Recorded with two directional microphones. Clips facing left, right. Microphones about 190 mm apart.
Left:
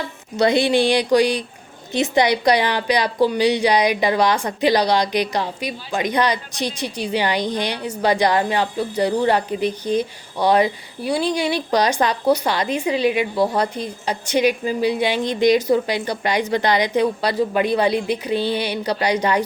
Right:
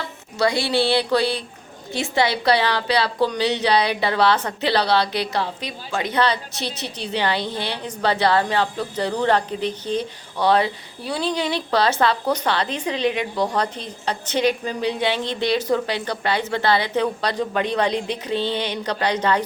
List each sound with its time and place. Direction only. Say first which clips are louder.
0.3 s a woman's voice: left 4 dB; 20° left (ahead or behind)